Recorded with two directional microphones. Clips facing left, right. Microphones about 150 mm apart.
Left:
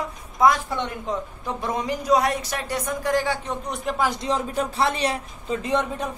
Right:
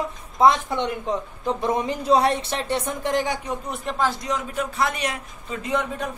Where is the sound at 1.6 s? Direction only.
20° right (ahead or behind).